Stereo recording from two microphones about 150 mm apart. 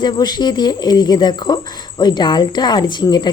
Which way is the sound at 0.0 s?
30° left (ahead or behind).